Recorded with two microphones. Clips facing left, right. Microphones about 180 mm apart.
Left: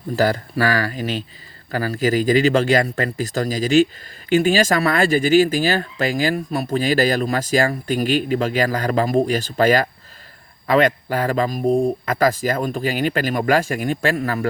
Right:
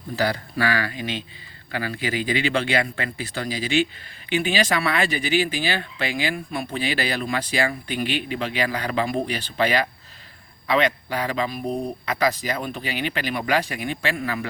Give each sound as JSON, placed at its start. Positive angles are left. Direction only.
{"t": 0.2, "sound": "speech", "side_deg": 40}